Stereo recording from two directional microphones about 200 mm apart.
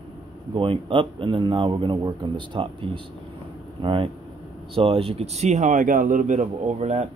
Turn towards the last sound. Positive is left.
turn(degrees=-35)  # may be behind; listen again after turning